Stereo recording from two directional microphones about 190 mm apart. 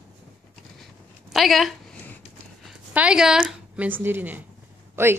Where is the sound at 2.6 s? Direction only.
5° right (ahead or behind).